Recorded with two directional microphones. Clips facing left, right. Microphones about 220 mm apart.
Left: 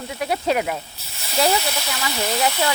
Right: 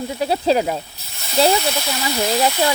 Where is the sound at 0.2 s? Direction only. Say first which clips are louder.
Right 4 dB; 30° right (ahead or behind).